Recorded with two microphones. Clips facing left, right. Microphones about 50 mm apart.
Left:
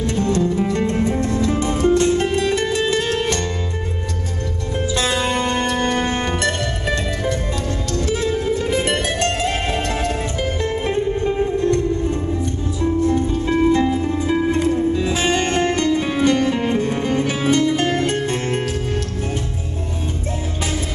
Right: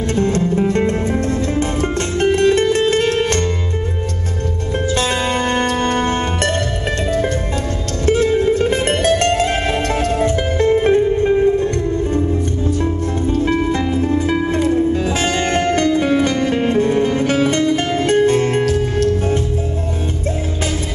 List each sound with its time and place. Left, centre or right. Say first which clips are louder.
0.1 s music: right 3 dB; right
4.8 s music: right 1 dB; right
13.0 s music: right 1 dB; right
15.7 s music: right 4 dB; right